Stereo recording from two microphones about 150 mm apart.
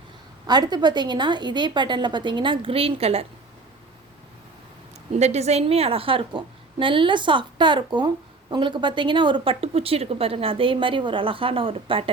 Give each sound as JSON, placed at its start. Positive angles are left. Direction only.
{"t": 0.4, "sound": "a woman's voice", "side_deg": -30}
{"t": 5.1, "sound": "a woman's voice", "side_deg": -50}